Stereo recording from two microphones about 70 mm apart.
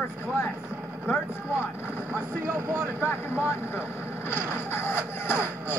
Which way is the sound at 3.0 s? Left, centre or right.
Left.